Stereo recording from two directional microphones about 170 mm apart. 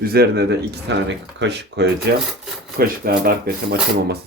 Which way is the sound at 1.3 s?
90° right.